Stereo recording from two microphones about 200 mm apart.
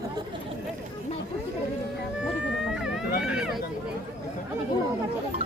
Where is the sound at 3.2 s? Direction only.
5° right (ahead or behind).